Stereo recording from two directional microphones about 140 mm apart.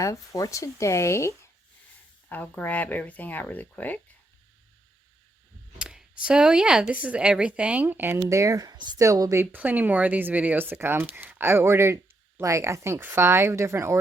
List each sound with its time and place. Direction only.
0.0 s speech: 25° left (ahead or behind)
2.3 s speech: 10° left (ahead or behind)
5.8 s speech: 5° right (ahead or behind)